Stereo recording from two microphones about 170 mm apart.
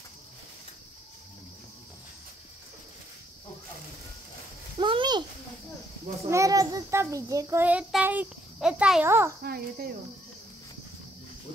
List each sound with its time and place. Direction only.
4.7 s a sound: 30° right (ahead or behind)
6.2 s a child's voice: 20° right (ahead or behind)
9.4 s speech: 60° right (ahead or behind)